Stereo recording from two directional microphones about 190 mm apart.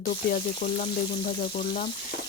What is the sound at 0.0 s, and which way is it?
Frying, 45° left (ahead or behind).